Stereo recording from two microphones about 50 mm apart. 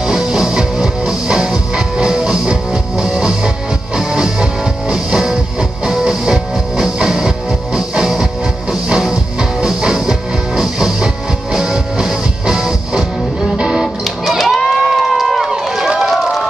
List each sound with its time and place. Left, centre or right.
0.0 s music: centre
14.6 s run: centre